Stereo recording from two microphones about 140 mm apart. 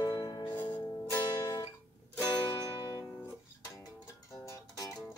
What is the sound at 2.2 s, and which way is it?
Music, 20° right (ahead or behind).